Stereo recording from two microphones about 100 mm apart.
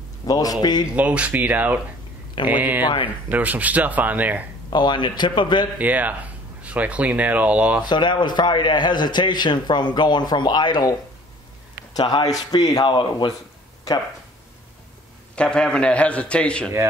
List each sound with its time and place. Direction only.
0.3 s a man's voice: 40° left (ahead or behind)
0.9 s speech: 15° right (ahead or behind)
4.6 s a man's voice: 50° left (ahead or behind)
5.8 s speech: 15° right (ahead or behind)
7.8 s a man's voice: 50° left (ahead or behind)
15.3 s a man's voice: 10° left (ahead or behind)